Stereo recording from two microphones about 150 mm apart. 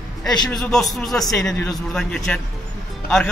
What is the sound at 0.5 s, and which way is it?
A man's voice, centre (ahead or behind).